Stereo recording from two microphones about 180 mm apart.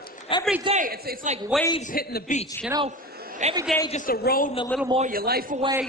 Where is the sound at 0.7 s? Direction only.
45° right (ahead or behind).